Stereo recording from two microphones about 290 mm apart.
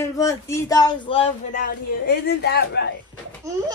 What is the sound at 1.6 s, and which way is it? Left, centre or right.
A woman's voice, left.